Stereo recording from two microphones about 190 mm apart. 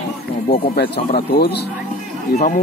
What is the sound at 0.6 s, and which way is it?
Speech, 55° left (ahead or behind).